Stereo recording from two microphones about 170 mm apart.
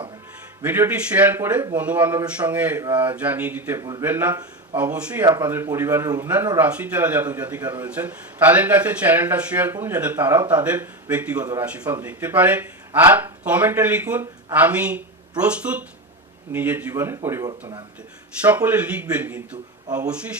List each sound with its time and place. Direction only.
0.6 s speech: 10° right (ahead or behind)